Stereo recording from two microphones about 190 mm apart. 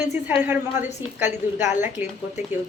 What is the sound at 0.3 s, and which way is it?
Speech, 10° right (ahead or behind).